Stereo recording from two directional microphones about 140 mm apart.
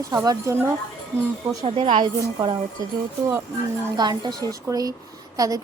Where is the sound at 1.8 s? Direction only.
35° right (ahead or behind).